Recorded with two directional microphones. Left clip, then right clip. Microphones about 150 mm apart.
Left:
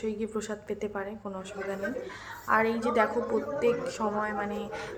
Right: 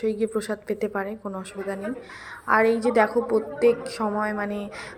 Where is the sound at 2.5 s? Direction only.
30° right (ahead or behind).